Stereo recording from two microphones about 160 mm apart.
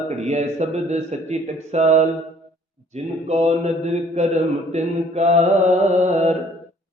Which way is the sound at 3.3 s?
45° right (ahead or behind).